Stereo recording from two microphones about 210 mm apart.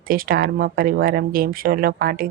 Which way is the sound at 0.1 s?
45° right (ahead or behind).